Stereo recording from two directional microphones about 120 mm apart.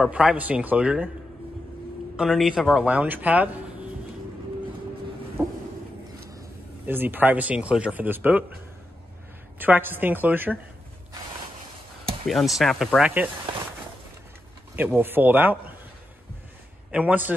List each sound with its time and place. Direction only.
0.0 s speech: 5° right (ahead or behind)
2.1 s speech: 5° right (ahead or behind)
5.4 s vehicle: 25° right (ahead or behind)
6.9 s speech: 15° right (ahead or behind)
9.6 s speech: 15° right (ahead or behind)
12.3 s speech: centre (ahead or behind)
15.0 s speech: 15° right (ahead or behind)
16.9 s speech: 15° right (ahead or behind)